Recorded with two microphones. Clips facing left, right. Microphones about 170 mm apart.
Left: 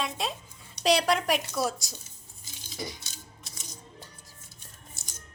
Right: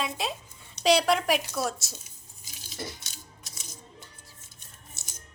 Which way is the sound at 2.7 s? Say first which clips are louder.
Left 1 dB; centre (ahead or behind).